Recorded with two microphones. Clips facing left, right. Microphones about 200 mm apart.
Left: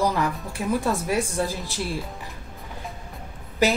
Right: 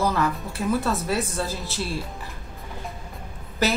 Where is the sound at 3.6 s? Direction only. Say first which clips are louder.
Left 2 dB; 10° left (ahead or behind).